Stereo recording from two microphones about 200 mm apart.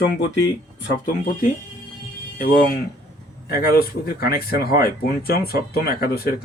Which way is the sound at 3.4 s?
50° left (ahead or behind).